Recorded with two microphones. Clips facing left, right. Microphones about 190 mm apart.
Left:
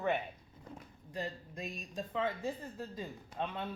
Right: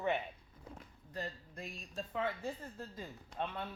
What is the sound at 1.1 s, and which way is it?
A woman's voice, 15° left (ahead or behind).